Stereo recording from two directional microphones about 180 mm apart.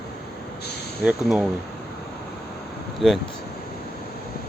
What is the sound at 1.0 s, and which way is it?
Speech, 5° right (ahead or behind).